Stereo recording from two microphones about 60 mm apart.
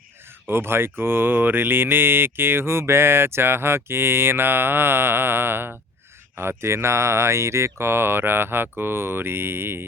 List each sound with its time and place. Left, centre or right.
0.4 s speech: right